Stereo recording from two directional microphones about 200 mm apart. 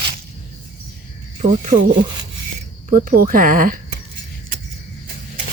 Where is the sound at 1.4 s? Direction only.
40° right (ahead or behind).